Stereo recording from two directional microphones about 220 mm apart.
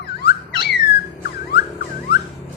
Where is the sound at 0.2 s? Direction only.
45° left (ahead or behind).